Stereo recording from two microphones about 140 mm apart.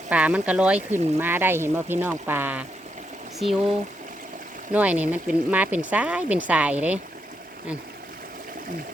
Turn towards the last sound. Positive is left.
turn(degrees=-10)  # may be behind; listen again after turning